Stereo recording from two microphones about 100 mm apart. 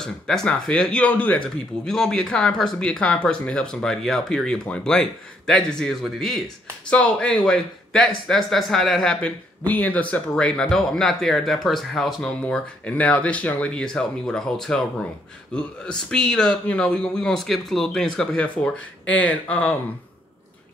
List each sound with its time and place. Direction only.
0.0 s a man's voice: 5° left (ahead or behind)
9.7 s a man's voice: 15° left (ahead or behind)